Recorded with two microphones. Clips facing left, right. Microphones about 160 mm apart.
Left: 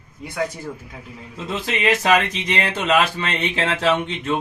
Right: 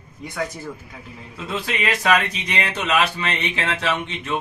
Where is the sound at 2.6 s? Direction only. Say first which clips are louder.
Left 2 dB; 35° left (ahead or behind).